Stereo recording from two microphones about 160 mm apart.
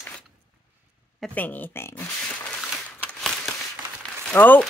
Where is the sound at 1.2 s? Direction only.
10° left (ahead or behind).